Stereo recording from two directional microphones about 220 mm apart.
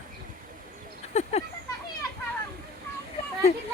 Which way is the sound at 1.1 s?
30° left (ahead or behind).